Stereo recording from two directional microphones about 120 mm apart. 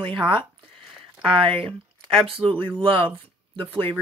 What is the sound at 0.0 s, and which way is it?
Speech, 45° right (ahead or behind).